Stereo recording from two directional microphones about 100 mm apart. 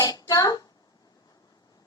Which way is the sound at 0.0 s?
40° left (ahead or behind).